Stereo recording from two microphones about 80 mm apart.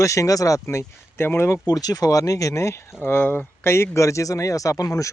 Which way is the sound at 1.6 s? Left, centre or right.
Left.